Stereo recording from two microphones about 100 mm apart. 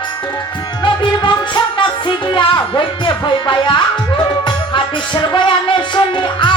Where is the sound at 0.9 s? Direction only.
50° left (ahead or behind).